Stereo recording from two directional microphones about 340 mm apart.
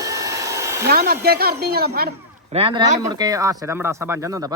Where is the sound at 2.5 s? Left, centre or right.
Centre.